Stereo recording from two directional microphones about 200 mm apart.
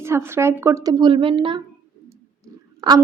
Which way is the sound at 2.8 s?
20° right (ahead or behind).